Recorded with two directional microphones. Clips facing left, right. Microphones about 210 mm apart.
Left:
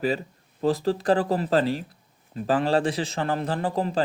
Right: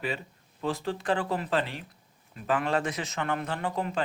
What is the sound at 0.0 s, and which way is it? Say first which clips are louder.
Speech: left 8 dB; 35° left (ahead or behind).